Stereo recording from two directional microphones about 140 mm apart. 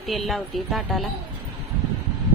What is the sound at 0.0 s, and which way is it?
A woman's voice, centre (ahead or behind).